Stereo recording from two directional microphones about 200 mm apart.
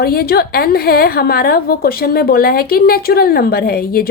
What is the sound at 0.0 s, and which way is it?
A woman's voice, 50° left (ahead or behind).